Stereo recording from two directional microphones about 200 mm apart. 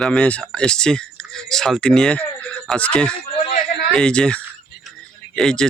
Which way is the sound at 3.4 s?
40° left (ahead or behind).